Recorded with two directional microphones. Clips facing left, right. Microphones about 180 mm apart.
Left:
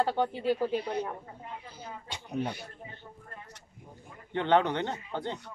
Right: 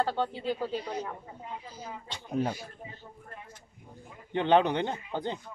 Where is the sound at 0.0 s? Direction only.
15° left (ahead or behind).